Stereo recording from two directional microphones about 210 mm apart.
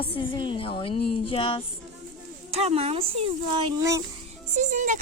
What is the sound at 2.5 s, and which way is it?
Speech, 30° right (ahead or behind).